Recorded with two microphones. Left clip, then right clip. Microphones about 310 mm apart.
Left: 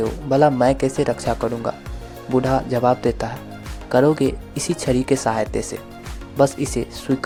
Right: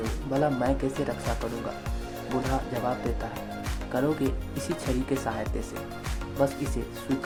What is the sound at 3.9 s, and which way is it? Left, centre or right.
Speech, left.